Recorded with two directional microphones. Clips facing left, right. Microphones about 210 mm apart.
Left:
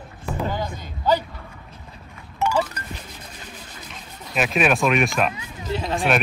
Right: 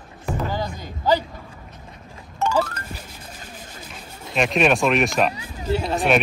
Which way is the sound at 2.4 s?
10° left (ahead or behind).